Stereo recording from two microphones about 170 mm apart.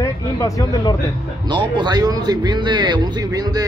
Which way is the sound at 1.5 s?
25° right (ahead or behind).